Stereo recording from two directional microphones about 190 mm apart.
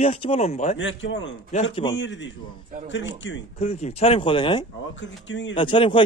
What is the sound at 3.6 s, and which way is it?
Speech, 35° left (ahead or behind).